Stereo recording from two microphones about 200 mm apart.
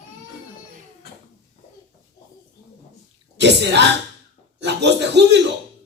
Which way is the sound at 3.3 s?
60° right (ahead or behind).